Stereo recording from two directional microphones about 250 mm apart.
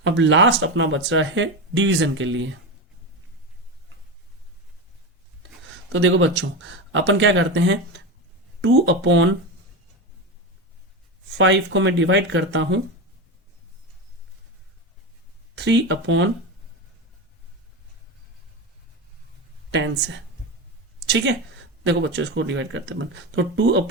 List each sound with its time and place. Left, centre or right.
0.0 s speech: right
5.4 s a sound: right
6.9 s speech: right
11.3 s speech: right
15.6 s speech: right
19.7 s speech: right
21.8 s speech: right